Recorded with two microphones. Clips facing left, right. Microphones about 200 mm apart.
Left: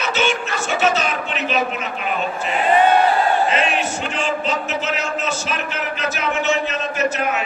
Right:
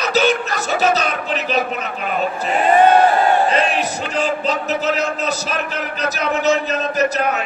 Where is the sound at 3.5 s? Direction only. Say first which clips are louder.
Right 2 dB; 35° right (ahead or behind).